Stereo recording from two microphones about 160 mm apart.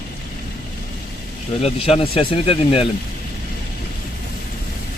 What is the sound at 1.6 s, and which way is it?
Speech, 35° left (ahead or behind).